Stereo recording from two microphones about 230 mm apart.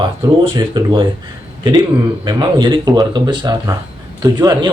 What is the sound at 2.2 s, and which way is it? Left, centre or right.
Speech, centre.